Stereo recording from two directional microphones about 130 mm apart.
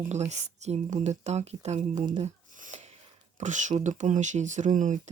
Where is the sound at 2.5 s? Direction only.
75° right (ahead or behind).